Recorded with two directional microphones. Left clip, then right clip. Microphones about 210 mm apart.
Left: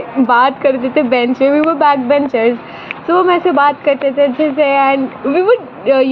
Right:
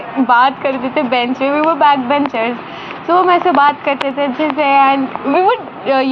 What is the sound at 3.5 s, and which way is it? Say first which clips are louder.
A woman's voice: even; 50° left (ahead or behind).